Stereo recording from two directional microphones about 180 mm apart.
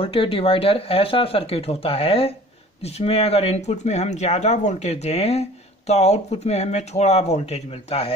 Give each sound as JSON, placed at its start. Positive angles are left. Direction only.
{"t": 0.0, "sound": "speech", "side_deg": 30}